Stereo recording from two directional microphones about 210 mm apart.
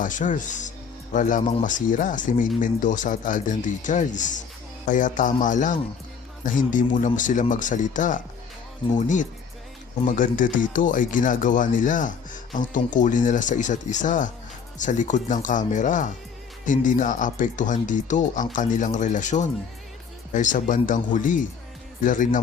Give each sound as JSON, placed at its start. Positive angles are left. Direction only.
{"t": 0.0, "sound": "speech", "side_deg": 35}